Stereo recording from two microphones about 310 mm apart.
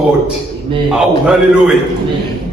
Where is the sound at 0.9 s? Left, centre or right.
Centre.